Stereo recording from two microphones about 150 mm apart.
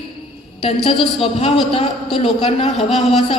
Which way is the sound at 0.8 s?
35° left (ahead or behind).